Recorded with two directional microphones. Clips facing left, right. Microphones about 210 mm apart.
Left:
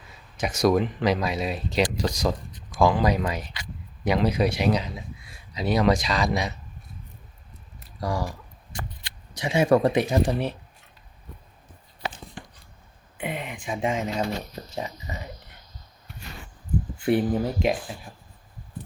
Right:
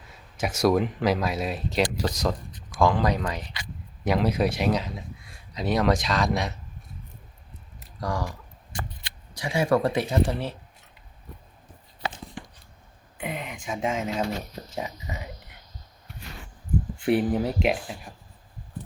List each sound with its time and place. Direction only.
0.1 s speech: 5° right (ahead or behind)
4.0 s speech: centre (ahead or behind)
8.0 s speech: 10° left (ahead or behind)
9.3 s speech: 20° left (ahead or behind)
13.1 s speech: centre (ahead or behind)
17.0 s speech: centre (ahead or behind)